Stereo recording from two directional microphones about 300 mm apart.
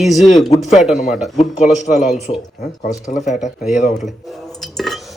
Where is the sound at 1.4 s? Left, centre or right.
Left.